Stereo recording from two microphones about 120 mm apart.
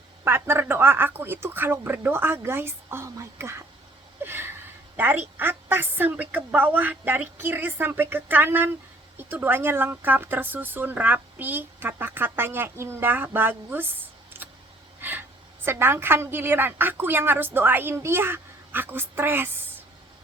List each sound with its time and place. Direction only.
0.3 s speech: 20° right (ahead or behind)
4.2 s wheeze: 20° right (ahead or behind)
4.9 s a woman's voice: 15° right (ahead or behind)
15.6 s a woman's voice: 20° right (ahead or behind)